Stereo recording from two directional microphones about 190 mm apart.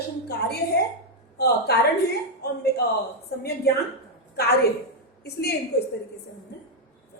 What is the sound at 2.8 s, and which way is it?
Speech, 60° left (ahead or behind).